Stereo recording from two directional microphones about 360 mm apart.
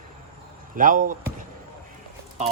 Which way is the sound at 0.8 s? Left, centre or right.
Right.